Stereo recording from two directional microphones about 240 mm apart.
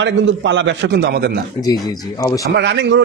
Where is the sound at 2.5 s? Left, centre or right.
Right.